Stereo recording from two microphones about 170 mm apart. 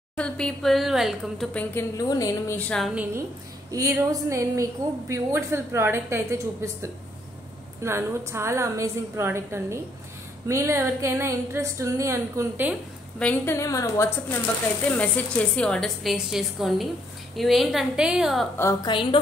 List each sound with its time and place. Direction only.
0.1 s a woman's voice: 5° left (ahead or behind)
2.7 s a woman's voice: centre (ahead or behind)
3.7 s a woman's voice: 20° right (ahead or behind)
13.2 s a woman's voice: 10° left (ahead or behind)
18.6 s a woman's voice: 20° left (ahead or behind)